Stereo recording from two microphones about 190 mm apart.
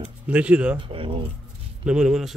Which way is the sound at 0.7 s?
25° right (ahead or behind).